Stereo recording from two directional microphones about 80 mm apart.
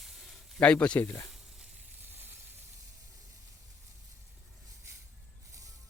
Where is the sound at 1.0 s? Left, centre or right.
Left.